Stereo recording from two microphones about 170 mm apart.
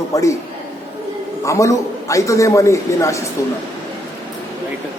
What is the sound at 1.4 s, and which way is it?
A man's voice, 20° left (ahead or behind).